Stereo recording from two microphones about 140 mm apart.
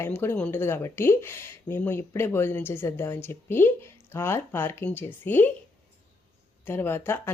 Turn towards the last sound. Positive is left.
turn(degrees=15)  # may be behind; listen again after turning